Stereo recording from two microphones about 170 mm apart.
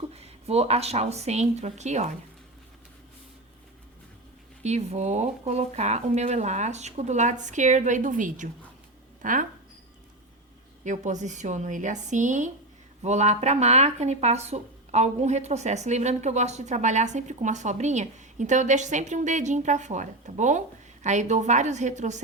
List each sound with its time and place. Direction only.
0.1 s speech: 35° right (ahead or behind)
4.6 s speech: 40° right (ahead or behind)
10.8 s speech: 45° right (ahead or behind)